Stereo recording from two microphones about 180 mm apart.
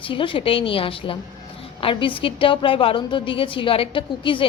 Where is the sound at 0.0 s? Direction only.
30° left (ahead or behind).